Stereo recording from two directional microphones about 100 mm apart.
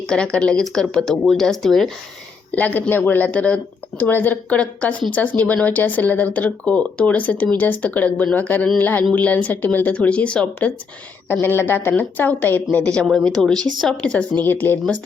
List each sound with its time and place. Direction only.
0.1 s speech: 10° left (ahead or behind)
2.5 s speech: 15° left (ahead or behind)
14.4 s speech: 20° left (ahead or behind)